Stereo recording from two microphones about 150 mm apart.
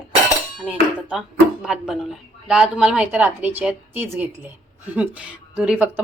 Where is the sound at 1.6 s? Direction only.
5° right (ahead or behind).